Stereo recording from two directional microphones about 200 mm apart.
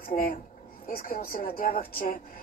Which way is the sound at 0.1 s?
45° left (ahead or behind).